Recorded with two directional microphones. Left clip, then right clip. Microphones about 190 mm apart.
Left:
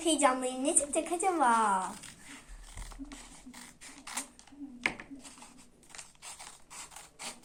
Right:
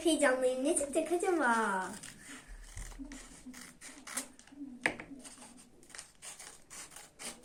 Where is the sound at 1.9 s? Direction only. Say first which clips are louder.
Left 3 dB; 10° right (ahead or behind).